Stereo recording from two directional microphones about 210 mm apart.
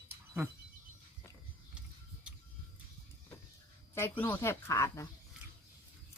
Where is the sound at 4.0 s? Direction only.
10° left (ahead or behind).